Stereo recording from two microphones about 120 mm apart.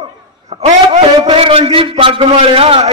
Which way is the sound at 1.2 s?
50° right (ahead or behind).